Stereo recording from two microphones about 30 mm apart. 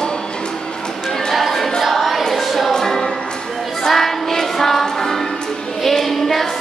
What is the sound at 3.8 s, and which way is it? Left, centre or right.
Child singing, centre.